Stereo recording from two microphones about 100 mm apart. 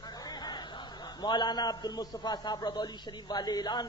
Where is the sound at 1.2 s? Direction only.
50° left (ahead or behind).